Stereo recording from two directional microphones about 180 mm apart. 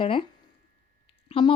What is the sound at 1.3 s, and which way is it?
Speech, 30° left (ahead or behind).